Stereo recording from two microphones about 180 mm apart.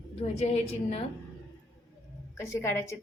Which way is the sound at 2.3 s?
15° left (ahead or behind).